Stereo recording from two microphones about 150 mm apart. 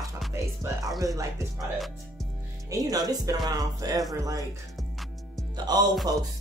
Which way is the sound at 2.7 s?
25° right (ahead or behind).